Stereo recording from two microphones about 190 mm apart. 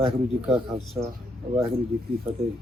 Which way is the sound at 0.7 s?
30° right (ahead or behind).